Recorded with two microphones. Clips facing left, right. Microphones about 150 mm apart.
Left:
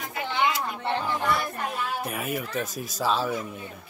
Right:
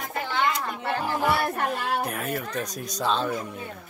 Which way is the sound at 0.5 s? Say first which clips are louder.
Right 1 dB; 5° left (ahead or behind).